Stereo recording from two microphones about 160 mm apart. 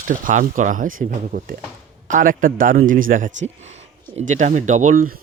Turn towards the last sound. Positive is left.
turn(degrees=-60)  # may be behind; listen again after turning